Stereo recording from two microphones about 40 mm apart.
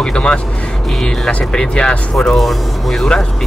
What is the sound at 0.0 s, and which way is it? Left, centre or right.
Speech, left.